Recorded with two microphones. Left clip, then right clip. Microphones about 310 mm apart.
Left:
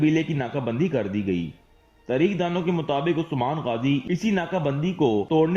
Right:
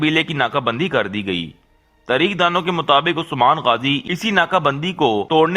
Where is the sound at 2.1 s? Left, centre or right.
Right.